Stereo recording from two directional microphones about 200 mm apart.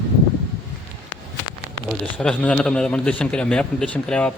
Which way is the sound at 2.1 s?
5° left (ahead or behind).